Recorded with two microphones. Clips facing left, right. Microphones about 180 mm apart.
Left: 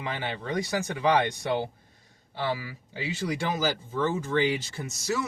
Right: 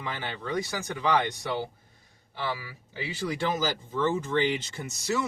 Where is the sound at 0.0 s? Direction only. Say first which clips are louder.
Left 2 dB; 15° left (ahead or behind).